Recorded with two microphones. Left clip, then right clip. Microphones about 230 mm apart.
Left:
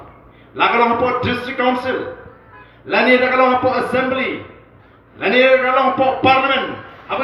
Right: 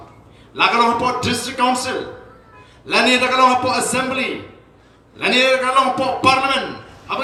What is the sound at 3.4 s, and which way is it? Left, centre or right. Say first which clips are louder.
A man's voice: even; right.